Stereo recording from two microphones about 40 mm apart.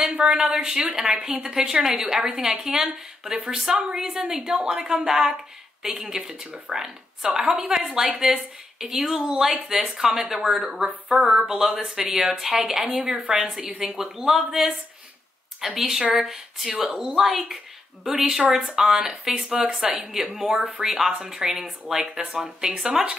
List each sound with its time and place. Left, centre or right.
0.2 s a woman's voice: right
17.3 s speech: centre; by 20.9 s right
20.9 s speech: centre